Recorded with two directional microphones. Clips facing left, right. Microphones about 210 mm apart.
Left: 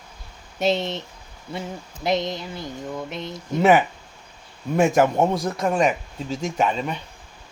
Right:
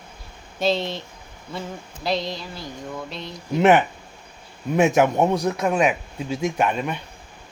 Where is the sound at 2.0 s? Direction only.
20° left (ahead or behind).